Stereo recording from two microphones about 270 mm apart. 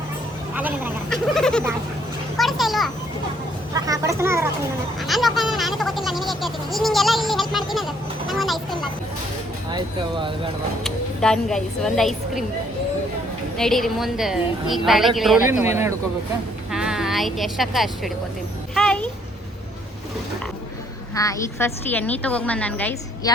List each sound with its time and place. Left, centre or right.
0.5 s speech: centre
3.8 s speech: centre
4.9 s speech: centre
9.7 s speech: centre
10.8 s speech: centre
13.6 s speech: centre
18.7 s a sound: centre
21.2 s speech: centre